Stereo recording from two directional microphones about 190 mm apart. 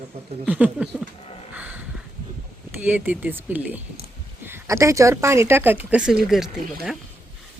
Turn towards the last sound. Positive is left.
turn(degrees=0)  # may be behind; listen again after turning